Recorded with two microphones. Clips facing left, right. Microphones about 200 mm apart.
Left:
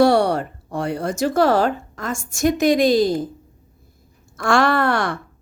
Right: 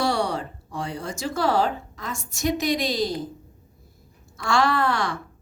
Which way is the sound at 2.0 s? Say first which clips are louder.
Left 8 dB; 50° left (ahead or behind).